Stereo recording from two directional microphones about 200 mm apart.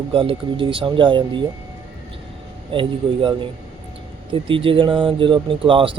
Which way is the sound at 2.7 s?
25° right (ahead or behind).